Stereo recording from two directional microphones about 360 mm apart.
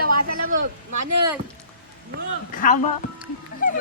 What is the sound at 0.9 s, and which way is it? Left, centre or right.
Speech, right.